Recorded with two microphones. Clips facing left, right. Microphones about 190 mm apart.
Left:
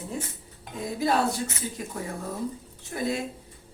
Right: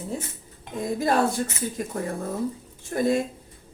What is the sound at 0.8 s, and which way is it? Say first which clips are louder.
Speech: right 2 dB; 50° right (ahead or behind).